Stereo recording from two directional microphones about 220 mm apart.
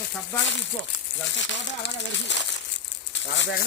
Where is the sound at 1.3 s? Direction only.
55° left (ahead or behind).